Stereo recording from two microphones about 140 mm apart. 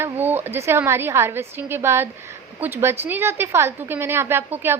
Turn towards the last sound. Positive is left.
turn(degrees=-15)  # may be behind; listen again after turning